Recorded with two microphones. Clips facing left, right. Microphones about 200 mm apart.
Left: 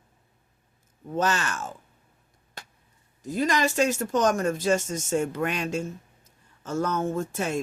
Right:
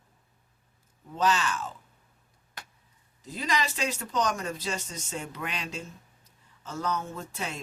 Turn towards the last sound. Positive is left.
turn(degrees=50)  # may be behind; listen again after turning